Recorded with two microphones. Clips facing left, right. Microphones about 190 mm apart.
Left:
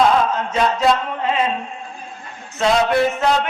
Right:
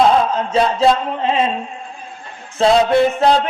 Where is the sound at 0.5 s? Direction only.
30° right (ahead or behind).